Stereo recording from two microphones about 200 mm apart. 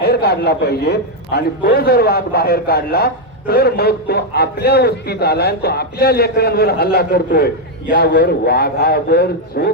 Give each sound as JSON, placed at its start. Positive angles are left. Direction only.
{"t": 0.0, "sound": "a man's voice", "side_deg": 55}